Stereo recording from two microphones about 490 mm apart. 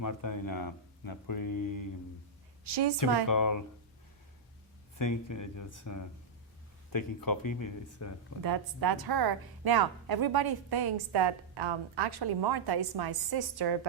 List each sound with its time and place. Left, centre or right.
0.0 s speech: left
2.6 s a woman's voice: right
3.2 s speech: left
4.9 s speech: left
8.4 s a woman's voice: right